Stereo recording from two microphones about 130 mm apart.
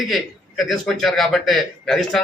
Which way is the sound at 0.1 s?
Centre (ahead or behind).